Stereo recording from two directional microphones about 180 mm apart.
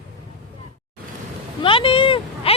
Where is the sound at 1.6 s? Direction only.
30° left (ahead or behind).